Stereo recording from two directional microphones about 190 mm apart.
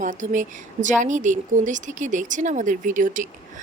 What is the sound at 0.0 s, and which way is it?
A woman's voice, 40° right (ahead or behind).